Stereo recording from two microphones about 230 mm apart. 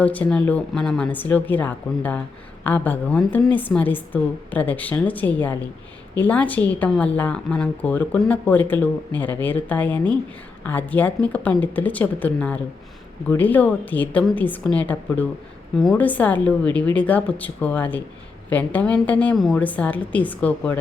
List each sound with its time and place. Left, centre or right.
0.0 s a woman's voice: centre